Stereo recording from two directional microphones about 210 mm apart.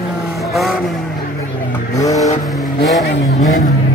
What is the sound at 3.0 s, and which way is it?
Vehicle, 50° left (ahead or behind).